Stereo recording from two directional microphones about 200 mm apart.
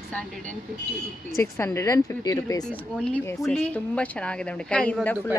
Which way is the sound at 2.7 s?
5° left (ahead or behind).